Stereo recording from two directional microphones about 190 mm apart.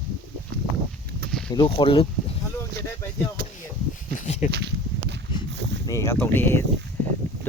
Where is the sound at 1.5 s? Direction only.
25° left (ahead or behind).